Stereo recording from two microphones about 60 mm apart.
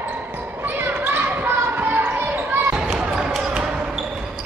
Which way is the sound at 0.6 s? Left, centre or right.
Right.